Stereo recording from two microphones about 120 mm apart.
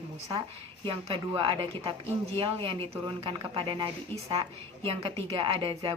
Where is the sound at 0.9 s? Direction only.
45° right (ahead or behind).